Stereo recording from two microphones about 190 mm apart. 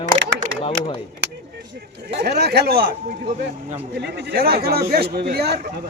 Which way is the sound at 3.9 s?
60° right (ahead or behind).